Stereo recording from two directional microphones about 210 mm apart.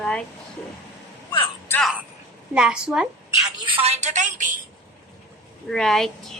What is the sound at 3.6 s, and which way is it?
Speech, 25° right (ahead or behind).